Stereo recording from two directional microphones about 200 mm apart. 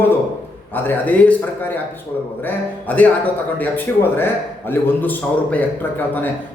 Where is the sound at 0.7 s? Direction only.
10° left (ahead or behind).